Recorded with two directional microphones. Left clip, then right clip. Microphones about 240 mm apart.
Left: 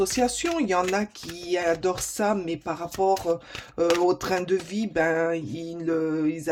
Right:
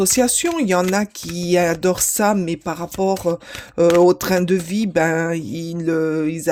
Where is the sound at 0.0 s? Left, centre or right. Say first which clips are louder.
Right 6 dB; right.